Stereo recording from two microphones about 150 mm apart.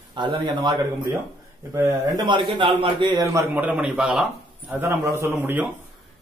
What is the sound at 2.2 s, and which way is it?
Speech, 30° right (ahead or behind).